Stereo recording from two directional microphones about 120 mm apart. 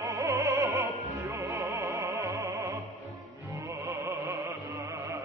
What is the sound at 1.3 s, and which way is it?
Music, 20° right (ahead or behind).